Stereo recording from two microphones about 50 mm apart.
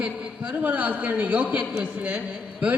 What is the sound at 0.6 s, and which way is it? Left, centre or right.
A man's voice, right.